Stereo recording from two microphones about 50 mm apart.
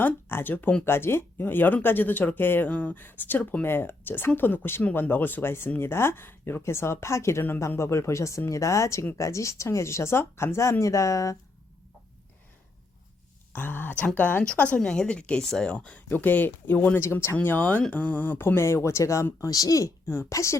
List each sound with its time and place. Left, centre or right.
0.0 s speech: left
0.9 s speech: left
6.6 s a woman's voice: left
13.5 s speech: left
14.8 s a woman's voice: centre
16.0 s speech: left
17.0 s a woman's voice: left
17.4 s speech: left
18.3 s speech: left
18.6 s speech: left